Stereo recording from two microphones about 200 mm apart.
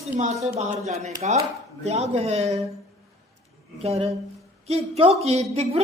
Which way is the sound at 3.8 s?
30° right (ahead or behind).